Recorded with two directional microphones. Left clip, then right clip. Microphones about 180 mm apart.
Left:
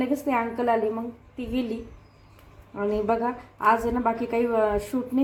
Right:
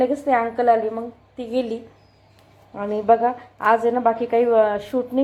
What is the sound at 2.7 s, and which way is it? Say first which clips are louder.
A woman's voice: right 7 dB; 25° right (ahead or behind).